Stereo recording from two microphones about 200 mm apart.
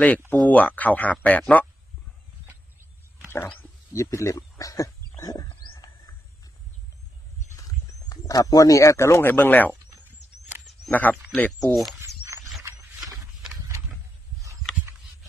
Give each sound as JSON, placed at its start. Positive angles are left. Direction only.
{"t": 0.3, "sound": "speech", "side_deg": 10}
{"t": 3.3, "sound": "a sound", "side_deg": 10}
{"t": 7.5, "sound": "speech", "side_deg": 20}
{"t": 10.9, "sound": "speech", "side_deg": 10}
{"t": 12.6, "sound": "wild animals", "side_deg": -20}